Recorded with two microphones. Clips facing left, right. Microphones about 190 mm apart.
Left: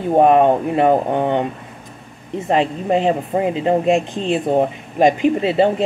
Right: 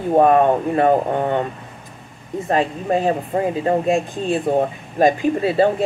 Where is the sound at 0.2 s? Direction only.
20° left (ahead or behind).